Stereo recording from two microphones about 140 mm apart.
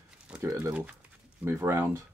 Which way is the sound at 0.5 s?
20° right (ahead or behind).